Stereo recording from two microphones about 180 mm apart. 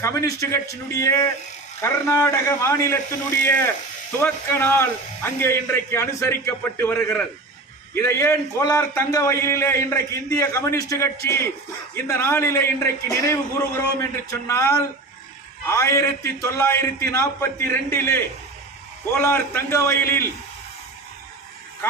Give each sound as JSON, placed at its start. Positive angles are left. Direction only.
{"t": 0.0, "sound": "a man's voice", "side_deg": 15}